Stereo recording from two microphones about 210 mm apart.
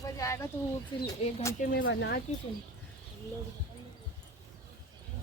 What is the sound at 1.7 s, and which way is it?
Speech, 55° left (ahead or behind).